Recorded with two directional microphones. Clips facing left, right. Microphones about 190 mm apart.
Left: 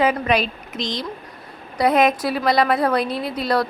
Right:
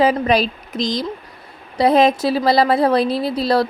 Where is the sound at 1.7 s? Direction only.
30° right (ahead or behind).